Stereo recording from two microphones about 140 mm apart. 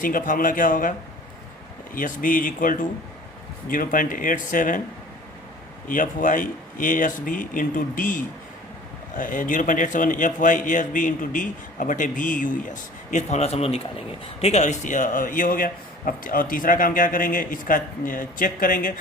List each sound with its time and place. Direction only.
0.0 s a man's voice: 75° left (ahead or behind)
2.0 s a man's voice: 75° left (ahead or behind)
5.9 s a man's voice: 70° left (ahead or behind)